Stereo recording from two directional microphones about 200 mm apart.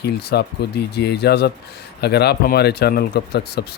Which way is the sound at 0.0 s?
55° left (ahead or behind).